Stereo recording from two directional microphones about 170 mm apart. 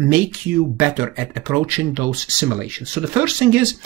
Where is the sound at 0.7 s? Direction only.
10° right (ahead or behind).